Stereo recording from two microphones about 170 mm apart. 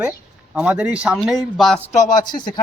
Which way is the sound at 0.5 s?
5° right (ahead or behind).